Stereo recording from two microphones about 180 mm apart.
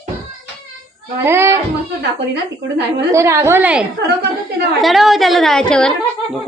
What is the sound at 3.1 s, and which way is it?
Speech, 15° right (ahead or behind).